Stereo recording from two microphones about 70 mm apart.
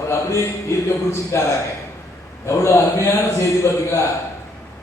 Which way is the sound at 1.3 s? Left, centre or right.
Left.